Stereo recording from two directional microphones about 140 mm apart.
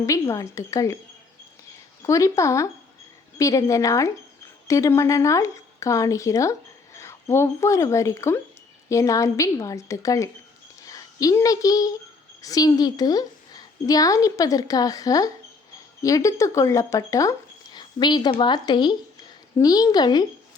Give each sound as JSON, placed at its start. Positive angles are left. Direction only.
{"t": 0.0, "sound": "a woman's voice", "side_deg": 20}
{"t": 2.0, "sound": "a woman's voice", "side_deg": 20}